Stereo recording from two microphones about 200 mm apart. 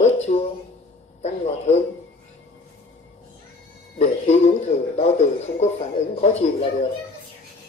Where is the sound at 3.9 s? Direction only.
35° left (ahead or behind).